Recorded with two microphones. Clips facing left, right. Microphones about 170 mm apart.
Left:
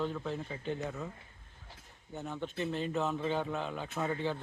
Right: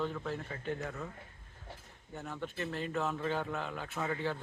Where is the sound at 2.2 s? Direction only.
20° left (ahead or behind).